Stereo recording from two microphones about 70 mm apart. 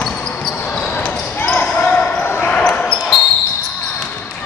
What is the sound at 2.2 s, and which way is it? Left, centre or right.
Basketball bounce, left.